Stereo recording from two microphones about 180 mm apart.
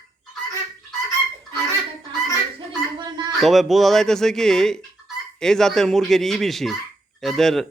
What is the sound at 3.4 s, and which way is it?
Speech, centre (ahead or behind).